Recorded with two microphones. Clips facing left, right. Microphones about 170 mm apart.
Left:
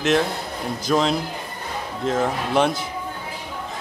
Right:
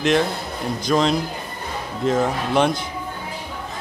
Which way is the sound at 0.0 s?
Centre (ahead or behind).